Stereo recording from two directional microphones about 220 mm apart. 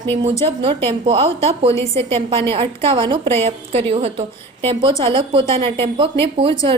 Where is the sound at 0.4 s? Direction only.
25° right (ahead or behind).